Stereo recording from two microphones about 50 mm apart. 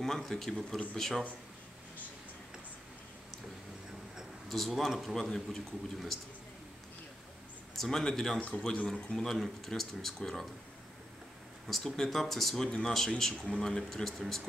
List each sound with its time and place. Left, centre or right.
0.3 s speech: centre
4.5 s speech: centre
7.7 s speech: centre
8.4 s a man's voice: left
8.8 s speech: centre
11.6 s speech: centre